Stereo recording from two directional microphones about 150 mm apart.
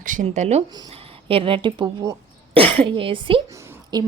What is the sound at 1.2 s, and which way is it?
Speech, 35° right (ahead or behind).